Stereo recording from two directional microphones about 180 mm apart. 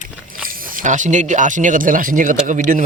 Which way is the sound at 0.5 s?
50° right (ahead or behind).